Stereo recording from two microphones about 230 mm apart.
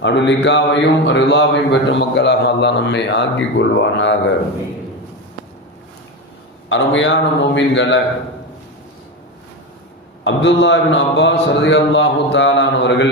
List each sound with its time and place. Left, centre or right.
0.0 s a man's voice: left
6.7 s a man's voice: left
10.2 s a man's voice: left